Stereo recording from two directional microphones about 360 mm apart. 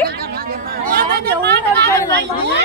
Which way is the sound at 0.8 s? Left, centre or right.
Right.